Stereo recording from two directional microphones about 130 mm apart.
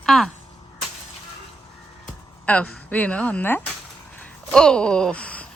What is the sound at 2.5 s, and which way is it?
A woman's voice, 10° left (ahead or behind).